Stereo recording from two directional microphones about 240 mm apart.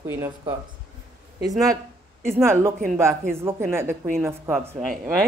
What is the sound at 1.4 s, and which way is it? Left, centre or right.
Speech, centre.